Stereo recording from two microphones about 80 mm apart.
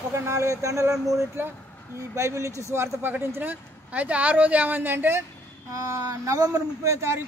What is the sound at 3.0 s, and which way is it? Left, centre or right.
Speech, right.